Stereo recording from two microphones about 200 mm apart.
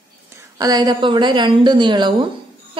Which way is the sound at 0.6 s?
20° right (ahead or behind).